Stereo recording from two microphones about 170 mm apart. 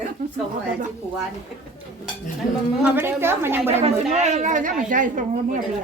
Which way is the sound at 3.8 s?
40° right (ahead or behind).